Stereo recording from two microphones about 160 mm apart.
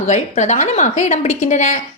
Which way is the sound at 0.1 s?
45° left (ahead or behind).